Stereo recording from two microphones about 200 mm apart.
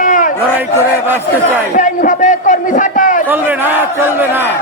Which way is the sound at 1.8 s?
40° left (ahead or behind).